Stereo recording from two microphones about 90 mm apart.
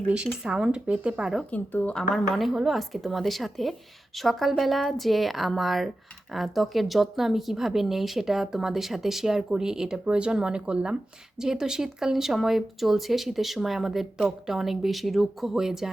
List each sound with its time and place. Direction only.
0.3 s speech: 5° right (ahead or behind)
1.5 s a woman's voice: 20° left (ahead or behind)
2.0 s speech: centre (ahead or behind)